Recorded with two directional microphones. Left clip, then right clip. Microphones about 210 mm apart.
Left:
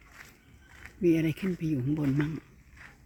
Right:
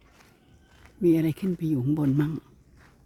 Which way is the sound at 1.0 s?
25° right (ahead or behind).